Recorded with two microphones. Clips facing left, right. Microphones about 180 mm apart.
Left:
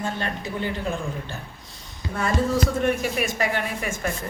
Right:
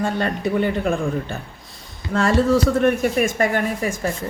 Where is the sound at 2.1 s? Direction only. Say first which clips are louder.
Right 7 dB; 80° right.